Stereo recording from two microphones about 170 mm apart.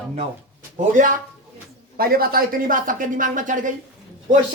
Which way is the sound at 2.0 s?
60° right (ahead or behind).